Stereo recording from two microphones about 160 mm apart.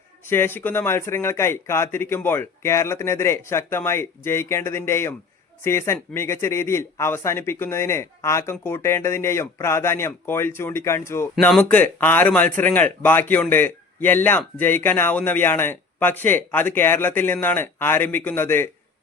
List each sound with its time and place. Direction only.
0.3 s speech: 15° left (ahead or behind)